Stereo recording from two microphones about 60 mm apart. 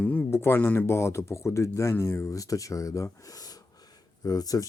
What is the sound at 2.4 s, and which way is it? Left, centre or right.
Speech, left.